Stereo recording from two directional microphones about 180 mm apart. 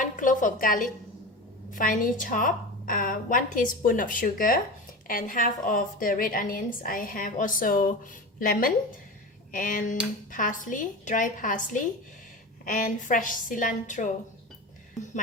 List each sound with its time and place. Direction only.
0.0 s a woman's voice: 45° left (ahead or behind)